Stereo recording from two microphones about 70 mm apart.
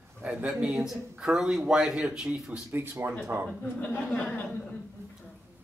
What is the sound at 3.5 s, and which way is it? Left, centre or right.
Speech, centre.